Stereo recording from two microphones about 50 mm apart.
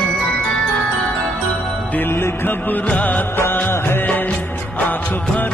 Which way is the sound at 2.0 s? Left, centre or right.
Left.